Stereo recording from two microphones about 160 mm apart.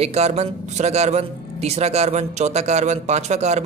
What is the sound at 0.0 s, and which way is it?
Speech, 45° right (ahead or behind).